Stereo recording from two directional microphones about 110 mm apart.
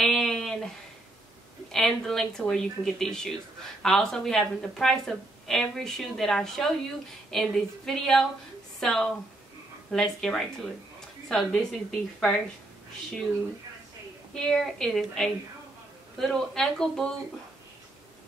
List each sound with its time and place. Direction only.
0.0 s a sound: 5° left (ahead or behind)
1.7 s a woman's voice: 5° left (ahead or behind)
14.3 s a woman's voice: 5° left (ahead or behind)